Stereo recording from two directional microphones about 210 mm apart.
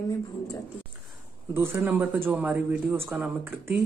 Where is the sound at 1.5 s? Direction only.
10° right (ahead or behind).